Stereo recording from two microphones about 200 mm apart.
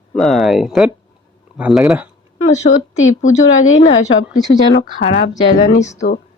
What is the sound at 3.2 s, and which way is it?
Speech, 85° left.